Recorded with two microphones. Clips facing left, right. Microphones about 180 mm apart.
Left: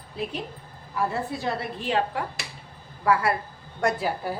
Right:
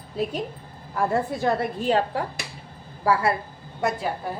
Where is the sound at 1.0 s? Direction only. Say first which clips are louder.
Right 4 dB; 50° right (ahead or behind); by 3.4 s 30° right (ahead or behind).